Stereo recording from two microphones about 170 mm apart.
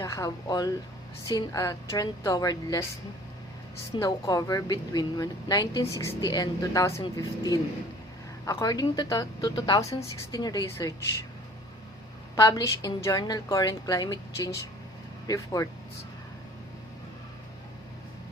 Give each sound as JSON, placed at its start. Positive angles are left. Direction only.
{"t": 0.0, "sound": "a woman's voice", "side_deg": 20}
{"t": 3.9, "sound": "a woman's voice", "side_deg": 20}
{"t": 12.4, "sound": "a woman's voice", "side_deg": 20}